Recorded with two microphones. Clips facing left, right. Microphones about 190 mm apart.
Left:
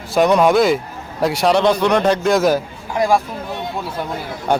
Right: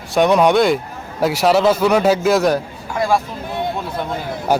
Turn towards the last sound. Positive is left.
turn(degrees=-5)  # may be behind; listen again after turning